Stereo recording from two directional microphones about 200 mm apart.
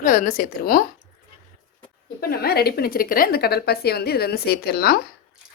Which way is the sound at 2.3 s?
50° left (ahead or behind).